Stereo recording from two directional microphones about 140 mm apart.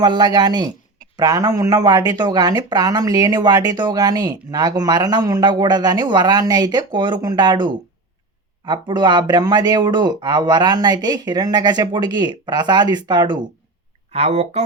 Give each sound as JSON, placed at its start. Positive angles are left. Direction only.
{"t": 0.0, "sound": "speech", "side_deg": -30}
{"t": 14.1, "sound": "speech", "side_deg": -50}